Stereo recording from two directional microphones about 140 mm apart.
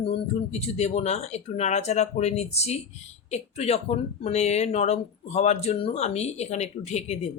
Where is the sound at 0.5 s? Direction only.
50° left (ahead or behind).